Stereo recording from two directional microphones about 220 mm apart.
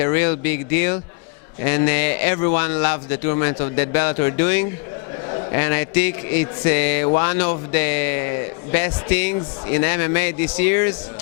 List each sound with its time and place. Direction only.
0.0 s a man's voice: 10° left (ahead or behind)